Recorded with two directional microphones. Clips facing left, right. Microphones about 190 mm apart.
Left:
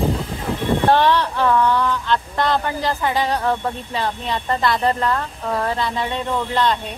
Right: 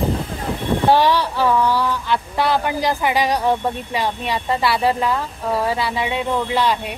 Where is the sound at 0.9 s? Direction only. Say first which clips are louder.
Even; 10° right (ahead or behind).